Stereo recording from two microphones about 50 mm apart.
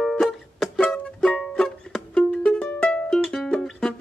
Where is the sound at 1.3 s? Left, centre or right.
Centre.